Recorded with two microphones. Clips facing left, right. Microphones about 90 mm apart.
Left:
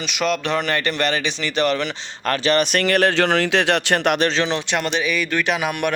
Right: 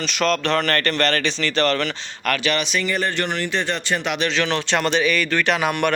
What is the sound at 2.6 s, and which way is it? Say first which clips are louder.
Speech: left 5 dB; 65° left (ahead or behind).